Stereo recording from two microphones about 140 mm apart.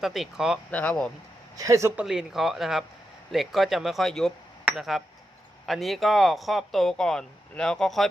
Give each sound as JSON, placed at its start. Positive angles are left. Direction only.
{"t": 0.0, "sound": "speech", "side_deg": 0}
{"t": 0.7, "sound": "speech", "side_deg": 10}
{"t": 1.5, "sound": "speech", "side_deg": -25}
{"t": 2.0, "sound": "speech", "side_deg": -5}
{"t": 4.6, "sound": "a sound", "side_deg": 0}
{"t": 5.6, "sound": "speech", "side_deg": 0}